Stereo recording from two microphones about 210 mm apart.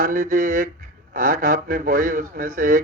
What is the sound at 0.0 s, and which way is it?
Speech, 40° right (ahead or behind).